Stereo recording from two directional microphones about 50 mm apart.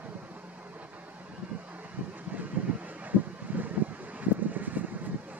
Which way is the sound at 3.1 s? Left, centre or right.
Right.